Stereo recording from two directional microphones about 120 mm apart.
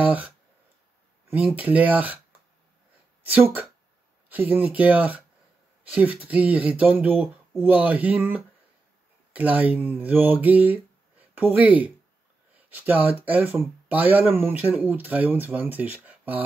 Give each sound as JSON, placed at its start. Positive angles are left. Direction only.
{"t": 0.0, "sound": "a sound", "side_deg": -15}
{"t": 1.3, "sound": "speech", "side_deg": -15}
{"t": 3.3, "sound": "speech", "side_deg": -15}